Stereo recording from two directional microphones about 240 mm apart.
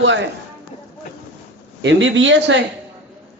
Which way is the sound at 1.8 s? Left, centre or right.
Right.